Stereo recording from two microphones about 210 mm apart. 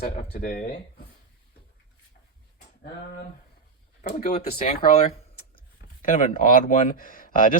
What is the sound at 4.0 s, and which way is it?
Speech, 40° left (ahead or behind).